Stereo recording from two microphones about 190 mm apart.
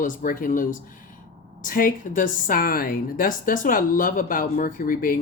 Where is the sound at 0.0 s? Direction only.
45° left (ahead or behind).